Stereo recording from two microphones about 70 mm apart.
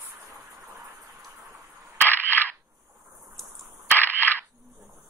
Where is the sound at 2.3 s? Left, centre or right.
Left.